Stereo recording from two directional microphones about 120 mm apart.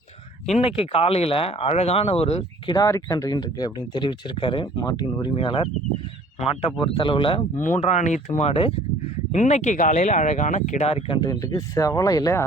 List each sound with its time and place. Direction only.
0.6 s speech: 50° left (ahead or behind)
2.6 s speech: 30° left (ahead or behind); by 4.7 s 45° left (ahead or behind)
4.8 s speech: 30° left (ahead or behind)
5.1 s speech: 40° left (ahead or behind)
7.6 s speech: 80° left; by 8.7 s 55° left (ahead or behind)
9.3 s speech: 80° left; by 11.2 s 60° left (ahead or behind)
11.2 s speech: 30° left (ahead or behind)